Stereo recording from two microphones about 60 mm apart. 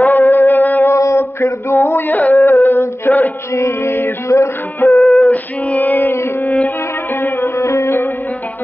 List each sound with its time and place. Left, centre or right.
0.0 s music: left
0.8 s a sound: left
2.3 s a sound: left
3.5 s music: left
4.3 s music: left
4.9 s music: centre
5.2 s music: left
7.5 s music: left